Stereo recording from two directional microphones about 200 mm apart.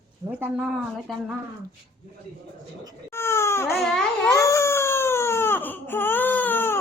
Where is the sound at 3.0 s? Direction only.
10° left (ahead or behind).